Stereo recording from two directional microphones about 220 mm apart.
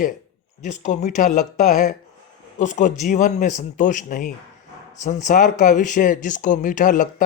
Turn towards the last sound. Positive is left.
turn(degrees=35)  # may be behind; listen again after turning